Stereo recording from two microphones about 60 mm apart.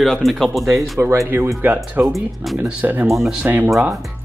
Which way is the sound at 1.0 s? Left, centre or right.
Right.